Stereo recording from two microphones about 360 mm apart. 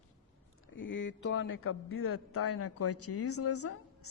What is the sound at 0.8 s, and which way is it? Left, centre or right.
Speech, left.